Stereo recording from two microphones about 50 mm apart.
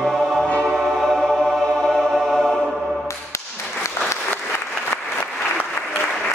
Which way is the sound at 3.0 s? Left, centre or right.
Left.